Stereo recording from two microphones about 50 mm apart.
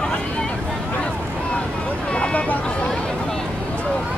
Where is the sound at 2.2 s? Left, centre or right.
Left.